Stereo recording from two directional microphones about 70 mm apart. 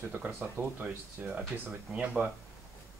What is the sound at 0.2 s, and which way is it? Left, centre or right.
Speech, right.